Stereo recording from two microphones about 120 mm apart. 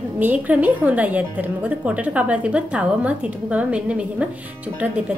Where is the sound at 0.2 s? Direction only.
15° right (ahead or behind).